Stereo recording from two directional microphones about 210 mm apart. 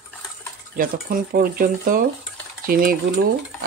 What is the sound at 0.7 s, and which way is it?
Speech, 45° right (ahead or behind).